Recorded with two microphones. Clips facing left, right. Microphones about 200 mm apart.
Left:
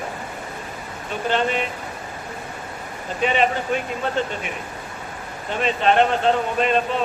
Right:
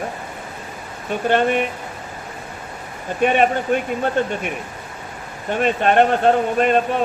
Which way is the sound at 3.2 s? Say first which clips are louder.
Right 4 dB; 55° right (ahead or behind).